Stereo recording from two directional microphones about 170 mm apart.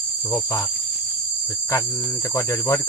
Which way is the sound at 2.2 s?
20° left (ahead or behind).